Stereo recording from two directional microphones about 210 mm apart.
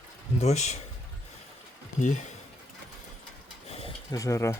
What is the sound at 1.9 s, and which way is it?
Speech, 35° left (ahead or behind).